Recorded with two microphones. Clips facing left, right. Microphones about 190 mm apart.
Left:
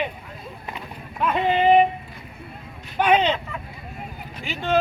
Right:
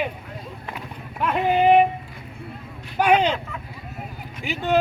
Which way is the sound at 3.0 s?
10° right (ahead or behind).